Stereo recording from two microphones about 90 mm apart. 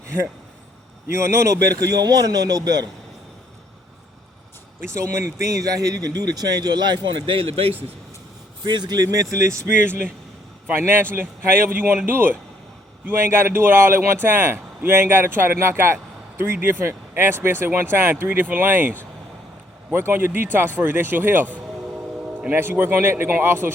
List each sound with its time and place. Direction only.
1.1 s speech: 30° right (ahead or behind)
4.9 s speech: 35° right (ahead or behind); by 7.8 s 90° right
8.6 s speech: 55° right (ahead or behind)
9.4 s speech: 35° right (ahead or behind)